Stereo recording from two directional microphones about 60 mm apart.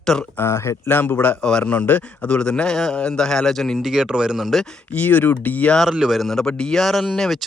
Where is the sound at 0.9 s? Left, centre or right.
Left.